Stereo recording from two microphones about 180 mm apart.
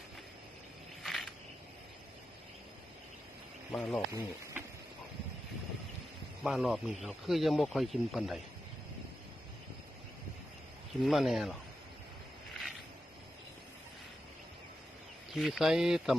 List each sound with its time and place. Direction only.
1.0 s a sound: centre (ahead or behind)
3.8 s speech: 5° left (ahead or behind)
4.1 s speech: 15° right (ahead or behind)
6.4 s speech: centre (ahead or behind)
11.0 s speech: centre (ahead or behind)
15.4 s speech: centre (ahead or behind)